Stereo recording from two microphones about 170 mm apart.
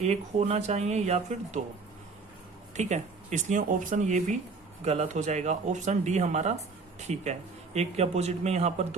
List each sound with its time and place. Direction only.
0.0 s speech: 40° right (ahead or behind)
2.7 s speech: 45° right (ahead or behind)